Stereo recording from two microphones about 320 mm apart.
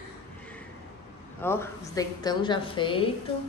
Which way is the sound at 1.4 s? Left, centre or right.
Centre.